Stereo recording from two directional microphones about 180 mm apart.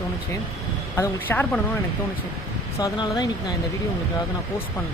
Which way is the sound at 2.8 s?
20° left (ahead or behind).